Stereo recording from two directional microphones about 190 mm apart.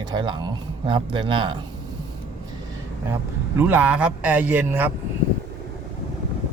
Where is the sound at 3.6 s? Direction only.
10° right (ahead or behind).